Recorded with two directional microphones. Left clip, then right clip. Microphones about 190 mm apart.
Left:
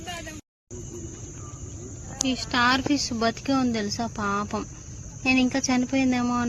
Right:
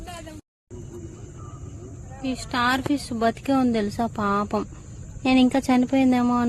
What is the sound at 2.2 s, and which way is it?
A woman's voice, 10° right (ahead or behind).